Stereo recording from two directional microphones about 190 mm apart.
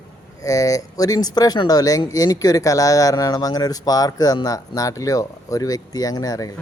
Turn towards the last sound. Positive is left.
turn(degrees=20)  # may be behind; listen again after turning